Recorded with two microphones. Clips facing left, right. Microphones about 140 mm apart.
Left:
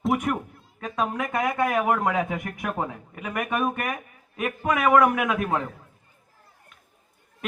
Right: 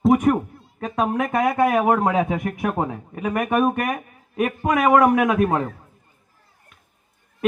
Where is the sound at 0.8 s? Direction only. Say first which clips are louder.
Right 5 dB; 25° right (ahead or behind).